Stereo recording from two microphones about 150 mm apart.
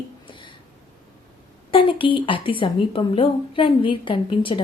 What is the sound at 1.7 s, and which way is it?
A woman's voice, 35° left (ahead or behind).